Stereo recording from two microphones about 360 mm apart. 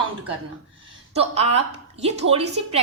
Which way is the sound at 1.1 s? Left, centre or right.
Centre.